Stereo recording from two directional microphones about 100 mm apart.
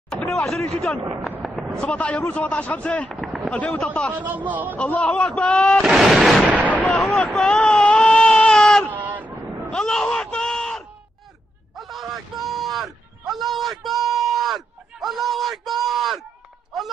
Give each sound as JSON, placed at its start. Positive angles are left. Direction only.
{"t": 0.1, "sound": "a sound", "side_deg": 5}
{"t": 1.4, "sound": "a sound", "side_deg": 0}
{"t": 1.8, "sound": "a man's voice", "side_deg": 10}
{"t": 4.1, "sound": "a man's voice", "side_deg": -15}
{"t": 4.7, "sound": "a man's voice", "side_deg": 15}
{"t": 5.8, "sound": "speech", "side_deg": 0}
{"t": 6.9, "sound": "baby cry", "side_deg": 0}
{"t": 8.9, "sound": "vehicle", "side_deg": -15}
{"t": 9.7, "sound": "a sound", "side_deg": 5}